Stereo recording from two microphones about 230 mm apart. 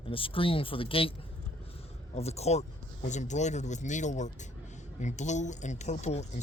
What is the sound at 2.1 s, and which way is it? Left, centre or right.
Speech, left.